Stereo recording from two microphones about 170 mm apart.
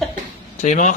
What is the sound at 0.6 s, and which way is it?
Speech, 45° left (ahead or behind).